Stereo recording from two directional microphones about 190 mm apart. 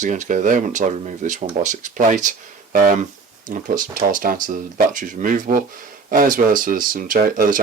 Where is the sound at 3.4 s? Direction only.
45° right (ahead or behind).